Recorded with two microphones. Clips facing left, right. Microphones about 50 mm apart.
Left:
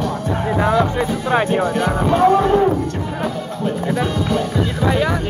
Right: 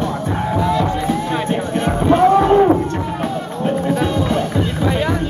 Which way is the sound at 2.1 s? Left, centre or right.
Right.